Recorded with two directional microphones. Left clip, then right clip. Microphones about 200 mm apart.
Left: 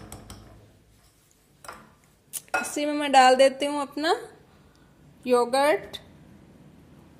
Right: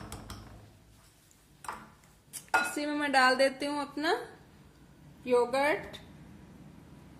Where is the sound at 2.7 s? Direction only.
35° left (ahead or behind).